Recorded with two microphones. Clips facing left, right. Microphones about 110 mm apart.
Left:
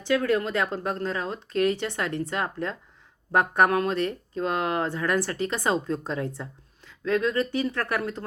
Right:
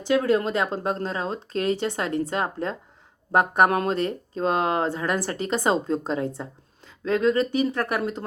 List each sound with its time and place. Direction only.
0.1 s speech: 25° right (ahead or behind)